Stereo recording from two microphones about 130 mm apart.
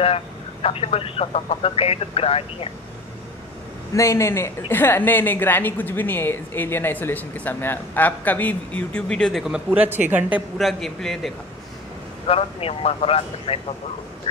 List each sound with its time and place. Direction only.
0.0 s speech: 50° left (ahead or behind)
3.9 s a woman's voice: 25° left (ahead or behind); by 10.4 s 15° right (ahead or behind)
10.6 s a man's voice: centre (ahead or behind)
12.3 s speech: 50° left (ahead or behind)